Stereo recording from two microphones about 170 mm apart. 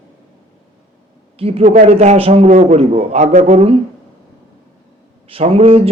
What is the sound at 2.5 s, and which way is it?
A man's voice, 45° right (ahead or behind).